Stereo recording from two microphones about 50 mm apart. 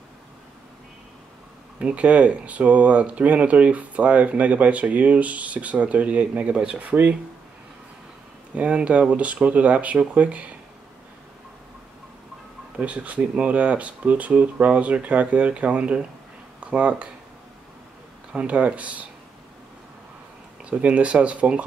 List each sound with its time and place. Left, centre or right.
1.8 s speech: right
8.5 s speech: right
12.7 s speech: right
18.3 s speech: right
20.8 s speech: right